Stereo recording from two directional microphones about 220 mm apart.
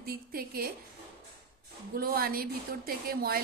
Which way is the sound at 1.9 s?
45° right (ahead or behind).